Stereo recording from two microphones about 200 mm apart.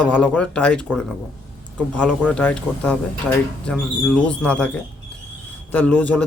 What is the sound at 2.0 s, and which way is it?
A man's voice, 5° left (ahead or behind).